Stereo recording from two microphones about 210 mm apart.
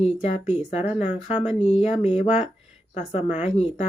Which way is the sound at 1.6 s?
35° left (ahead or behind).